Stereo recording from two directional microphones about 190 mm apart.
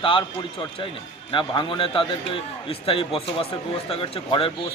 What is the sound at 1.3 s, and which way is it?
A man's voice, 25° left (ahead or behind).